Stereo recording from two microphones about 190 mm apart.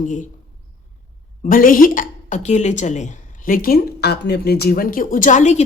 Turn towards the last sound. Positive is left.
turn(degrees=40)  # may be behind; listen again after turning